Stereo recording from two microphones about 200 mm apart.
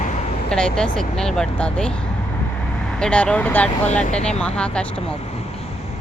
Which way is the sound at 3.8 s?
35° left (ahead or behind).